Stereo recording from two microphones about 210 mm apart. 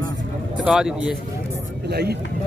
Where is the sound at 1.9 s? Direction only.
50° right (ahead or behind).